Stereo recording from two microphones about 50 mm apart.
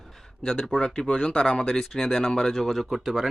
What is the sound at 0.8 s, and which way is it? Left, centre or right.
Speech, centre.